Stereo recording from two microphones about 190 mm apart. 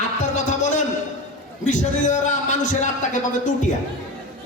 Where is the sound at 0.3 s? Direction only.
40° left (ahead or behind).